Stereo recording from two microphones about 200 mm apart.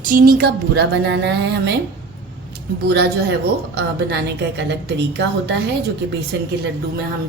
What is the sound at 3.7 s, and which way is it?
A woman's voice, 55° right (ahead or behind).